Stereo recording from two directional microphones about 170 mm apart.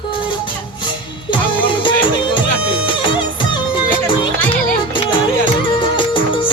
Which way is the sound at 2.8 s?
30° left (ahead or behind).